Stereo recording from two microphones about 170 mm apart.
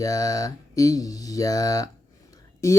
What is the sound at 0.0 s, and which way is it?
Speech, 20° left (ahead or behind).